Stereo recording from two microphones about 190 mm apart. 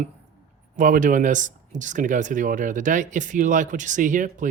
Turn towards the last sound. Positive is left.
turn(degrees=-45)  # may be behind; listen again after turning